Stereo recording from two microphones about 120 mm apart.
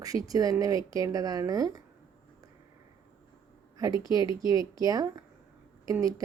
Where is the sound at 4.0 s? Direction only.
30° right (ahead or behind).